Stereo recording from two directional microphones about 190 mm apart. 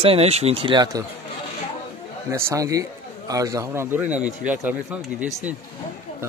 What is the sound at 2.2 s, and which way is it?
A man's voice, 15° right (ahead or behind).